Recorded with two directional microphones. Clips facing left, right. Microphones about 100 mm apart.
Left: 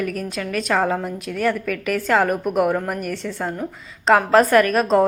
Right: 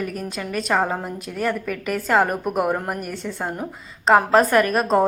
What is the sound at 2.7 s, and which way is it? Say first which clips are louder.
Speech: left 2 dB; 15° right (ahead or behind).